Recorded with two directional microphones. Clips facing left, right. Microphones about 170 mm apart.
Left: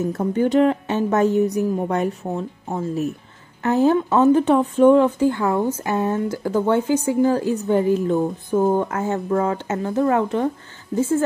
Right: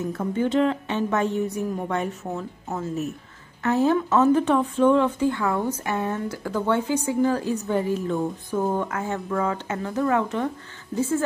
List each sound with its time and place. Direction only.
0.0 s speech: 35° left (ahead or behind)